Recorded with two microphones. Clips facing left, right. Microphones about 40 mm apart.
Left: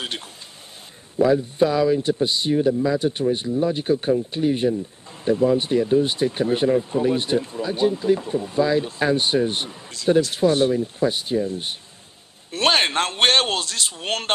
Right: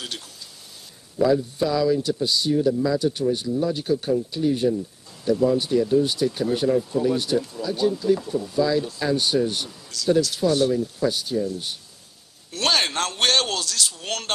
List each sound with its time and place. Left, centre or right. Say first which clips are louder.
1.1 s speech: left 2 dB; left